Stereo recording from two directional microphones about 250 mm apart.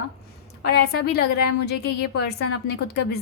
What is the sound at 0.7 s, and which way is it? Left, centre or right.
A woman's voice, left.